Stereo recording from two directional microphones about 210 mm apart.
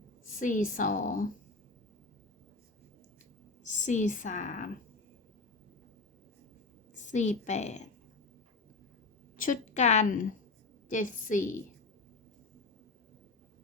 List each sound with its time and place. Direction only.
0.3 s a woman's voice: 40° left (ahead or behind)
3.6 s a woman's voice: 35° left (ahead or behind)
6.9 s a woman's voice: 35° left (ahead or behind)
9.4 s a woman's voice: 35° left (ahead or behind)